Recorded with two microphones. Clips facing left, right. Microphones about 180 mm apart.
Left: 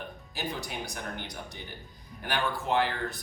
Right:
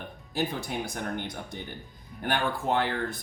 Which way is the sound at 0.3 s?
55° right (ahead or behind).